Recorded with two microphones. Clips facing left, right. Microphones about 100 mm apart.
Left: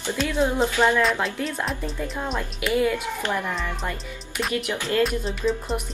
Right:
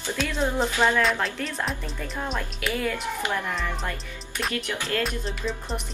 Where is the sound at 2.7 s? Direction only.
10° left (ahead or behind).